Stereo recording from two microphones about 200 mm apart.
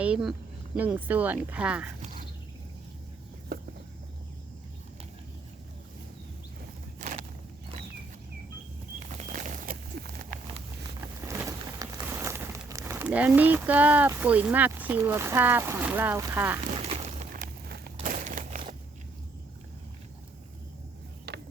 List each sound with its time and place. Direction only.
0.0 s speech: 5° right (ahead or behind)
7.0 s horse: 35° right (ahead or behind)
9.1 s a sound: 40° right (ahead or behind)
11.3 s speech: 15° right (ahead or behind)
17.3 s a sound: 50° right (ahead or behind)
18.0 s crumpling: 40° right (ahead or behind)
21.3 s ratchet: 55° right (ahead or behind)